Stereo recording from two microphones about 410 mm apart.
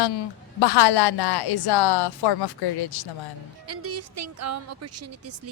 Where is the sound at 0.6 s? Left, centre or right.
Left.